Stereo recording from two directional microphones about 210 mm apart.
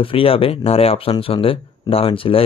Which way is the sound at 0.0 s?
25° left (ahead or behind).